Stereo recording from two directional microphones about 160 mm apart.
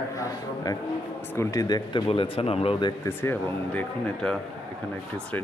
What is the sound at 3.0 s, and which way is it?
Speech, 15° left (ahead or behind).